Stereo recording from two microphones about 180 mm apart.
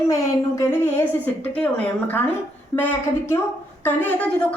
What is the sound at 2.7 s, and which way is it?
A woman's voice, 10° left (ahead or behind).